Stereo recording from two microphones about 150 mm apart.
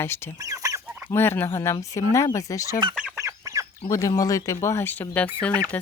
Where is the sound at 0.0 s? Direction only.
15° left (ahead or behind).